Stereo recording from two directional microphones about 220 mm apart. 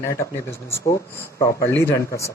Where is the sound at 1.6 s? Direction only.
10° left (ahead or behind).